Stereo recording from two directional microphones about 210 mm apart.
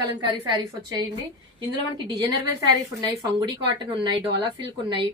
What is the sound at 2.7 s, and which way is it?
Speech, 15° right (ahead or behind).